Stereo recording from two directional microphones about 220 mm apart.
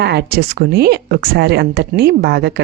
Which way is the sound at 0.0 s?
50° right (ahead or behind).